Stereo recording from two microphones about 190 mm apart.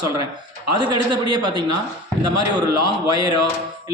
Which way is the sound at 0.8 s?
25° right (ahead or behind).